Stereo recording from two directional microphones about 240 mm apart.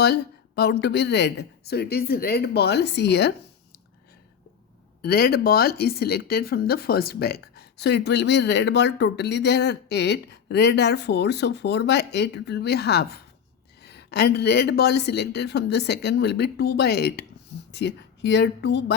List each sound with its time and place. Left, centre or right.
0.0 s speech: left
5.0 s speech: left